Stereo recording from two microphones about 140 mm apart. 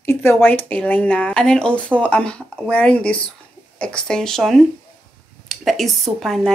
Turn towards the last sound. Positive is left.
turn(degrees=0)  # may be behind; listen again after turning